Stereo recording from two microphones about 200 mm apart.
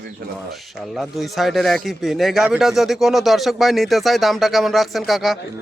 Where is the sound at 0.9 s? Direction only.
Centre (ahead or behind).